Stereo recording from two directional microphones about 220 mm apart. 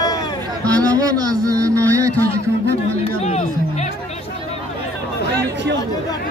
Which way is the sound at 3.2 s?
30° left (ahead or behind).